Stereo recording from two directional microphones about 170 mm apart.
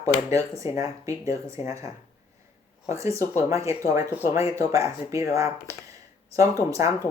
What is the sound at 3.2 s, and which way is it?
Speech, 15° left (ahead or behind).